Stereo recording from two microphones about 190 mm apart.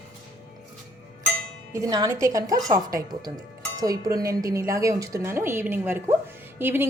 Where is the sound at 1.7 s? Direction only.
20° right (ahead or behind).